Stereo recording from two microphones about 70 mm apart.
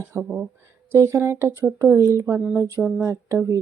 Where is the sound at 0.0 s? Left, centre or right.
Right.